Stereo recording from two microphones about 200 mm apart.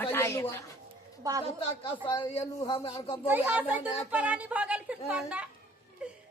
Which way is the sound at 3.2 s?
10° right (ahead or behind).